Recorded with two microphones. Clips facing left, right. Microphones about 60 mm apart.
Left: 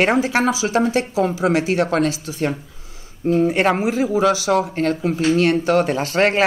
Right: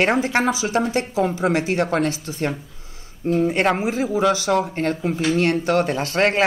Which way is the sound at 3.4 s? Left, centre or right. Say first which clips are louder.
Left 1 dB; centre.